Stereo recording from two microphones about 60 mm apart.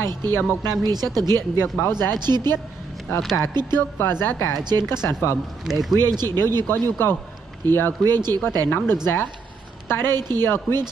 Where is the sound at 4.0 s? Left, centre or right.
Left.